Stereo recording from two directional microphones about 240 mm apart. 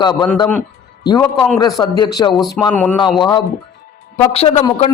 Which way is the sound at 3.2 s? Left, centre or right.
Centre.